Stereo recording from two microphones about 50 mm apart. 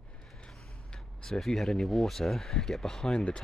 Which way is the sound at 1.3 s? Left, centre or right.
Centre.